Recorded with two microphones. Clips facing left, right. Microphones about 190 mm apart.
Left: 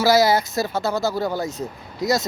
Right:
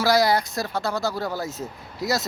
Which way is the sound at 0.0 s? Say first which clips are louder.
Left 3 dB; centre (ahead or behind).